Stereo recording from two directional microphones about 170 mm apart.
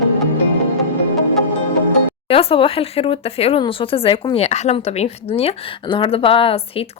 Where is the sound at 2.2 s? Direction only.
35° left (ahead or behind).